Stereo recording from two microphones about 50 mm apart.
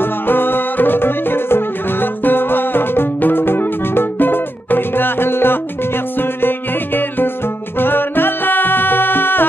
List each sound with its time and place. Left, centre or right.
0.0 s music: left